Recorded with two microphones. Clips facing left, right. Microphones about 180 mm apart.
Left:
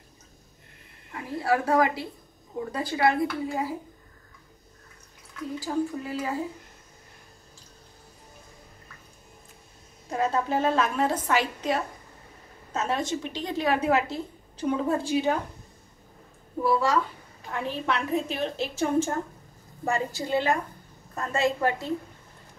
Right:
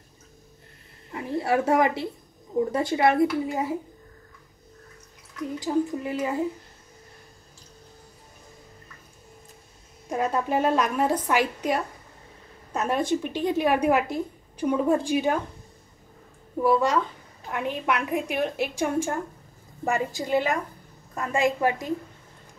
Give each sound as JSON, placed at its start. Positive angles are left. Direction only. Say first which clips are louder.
{"t": 1.1, "sound": "speech", "louder": "right 2 dB", "side_deg": -25}
{"t": 5.6, "sound": "speech", "louder": "right 3 dB", "side_deg": -20}
{"t": 10.1, "sound": "a woman's voice", "louder": "right 1 dB", "side_deg": -15}
{"t": 16.6, "sound": "a woman's voice", "louder": "right 2 dB", "side_deg": -20}